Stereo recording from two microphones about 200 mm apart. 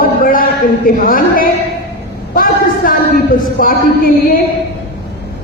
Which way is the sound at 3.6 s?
45° left (ahead or behind).